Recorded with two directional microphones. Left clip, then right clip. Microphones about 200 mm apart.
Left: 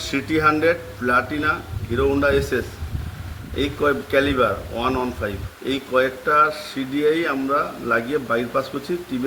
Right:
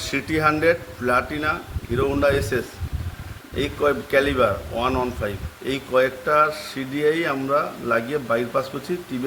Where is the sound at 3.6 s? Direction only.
45° right (ahead or behind).